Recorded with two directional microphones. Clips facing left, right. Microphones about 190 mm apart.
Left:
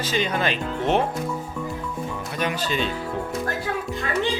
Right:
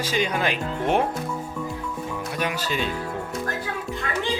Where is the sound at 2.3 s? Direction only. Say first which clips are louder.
Left 2 dB; 10° right (ahead or behind).